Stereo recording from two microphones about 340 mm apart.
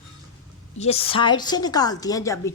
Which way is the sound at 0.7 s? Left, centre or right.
Centre.